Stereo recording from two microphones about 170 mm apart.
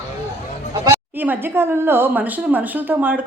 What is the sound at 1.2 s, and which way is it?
A woman's voice, 10° right (ahead or behind).